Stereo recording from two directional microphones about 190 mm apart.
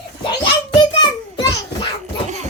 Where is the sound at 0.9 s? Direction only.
25° left (ahead or behind).